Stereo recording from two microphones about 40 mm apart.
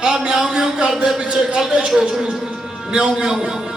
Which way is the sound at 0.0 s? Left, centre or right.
Centre.